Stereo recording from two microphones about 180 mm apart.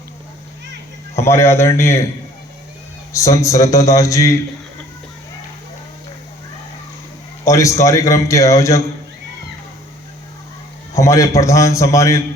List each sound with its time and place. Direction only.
1.1 s a man's voice: 15° left (ahead or behind)
3.1 s a man's voice: 15° left (ahead or behind)
7.4 s a man's voice: 15° left (ahead or behind)
10.9 s a man's voice: 15° left (ahead or behind)